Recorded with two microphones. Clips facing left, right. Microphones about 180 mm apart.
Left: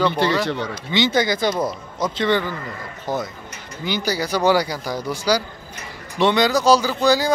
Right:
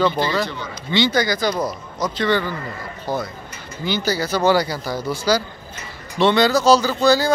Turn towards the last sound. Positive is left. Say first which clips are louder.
# right 1 dB
turn(degrees=15)  # may be behind; listen again after turning